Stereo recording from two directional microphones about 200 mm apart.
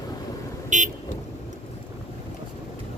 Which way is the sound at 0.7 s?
40° right (ahead or behind).